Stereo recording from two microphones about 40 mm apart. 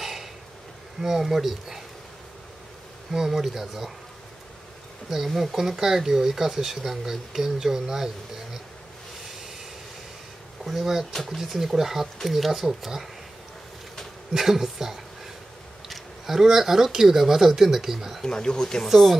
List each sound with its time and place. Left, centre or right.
0.0 s a sound: centre
1.0 s speech: centre
3.1 s speech: centre
5.1 s speech: centre
10.6 s speech: centre
14.3 s speech: centre
18.2 s speech: centre